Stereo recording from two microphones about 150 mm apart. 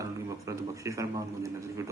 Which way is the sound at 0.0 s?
20° right (ahead or behind).